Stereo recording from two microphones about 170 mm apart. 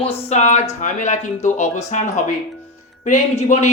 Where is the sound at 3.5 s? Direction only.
45° left (ahead or behind).